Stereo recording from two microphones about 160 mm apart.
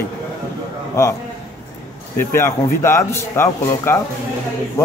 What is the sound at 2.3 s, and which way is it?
Speech, 15° left (ahead or behind).